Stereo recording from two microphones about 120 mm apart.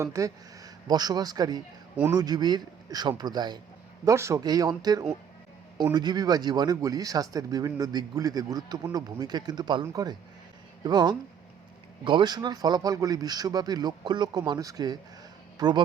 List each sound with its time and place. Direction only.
0.0 s speech: 25° right (ahead or behind)
4.0 s speech: 25° right (ahead or behind)